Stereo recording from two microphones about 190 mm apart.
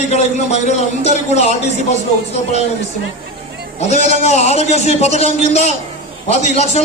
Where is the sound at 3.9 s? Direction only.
35° left (ahead or behind).